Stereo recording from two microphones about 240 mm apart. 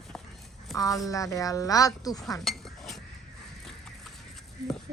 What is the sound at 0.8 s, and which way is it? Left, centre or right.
Speech, centre.